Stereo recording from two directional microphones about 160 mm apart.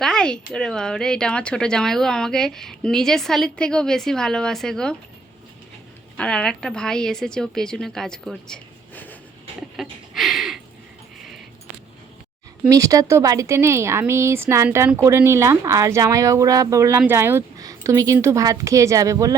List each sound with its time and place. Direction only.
0.0 s speech: 5° left (ahead or behind)
6.1 s speech: 5° left (ahead or behind)
9.7 s a sound: centre (ahead or behind)
12.6 s speech: 20° right (ahead or behind)